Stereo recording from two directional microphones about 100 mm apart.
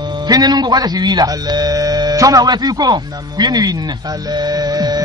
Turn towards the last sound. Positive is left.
turn(degrees=-40)  # may be behind; listen again after turning